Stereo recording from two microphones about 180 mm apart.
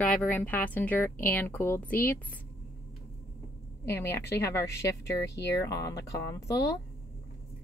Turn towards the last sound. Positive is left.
turn(degrees=20)  # may be behind; listen again after turning